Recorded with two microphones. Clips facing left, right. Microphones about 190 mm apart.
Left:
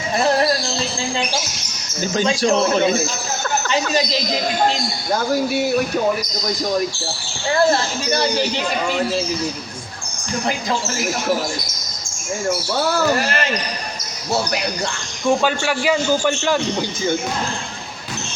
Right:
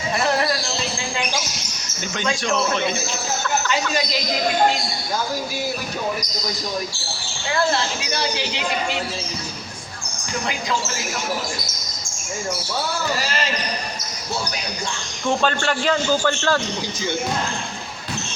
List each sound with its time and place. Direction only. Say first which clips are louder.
0.2 s basketball bounce: left 5 dB; 35° left (ahead or behind)
2.1 s speech: left 6 dB; 35° left (ahead or behind)
7.5 s speech: left 4 dB; 45° left (ahead or behind)
13.0 s speech: left 6 dB; 60° left (ahead or behind)
15.3 s speech: left 3 dB; 10° left (ahead or behind)